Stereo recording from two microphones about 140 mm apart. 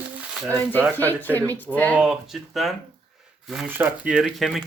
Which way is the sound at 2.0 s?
Centre (ahead or behind).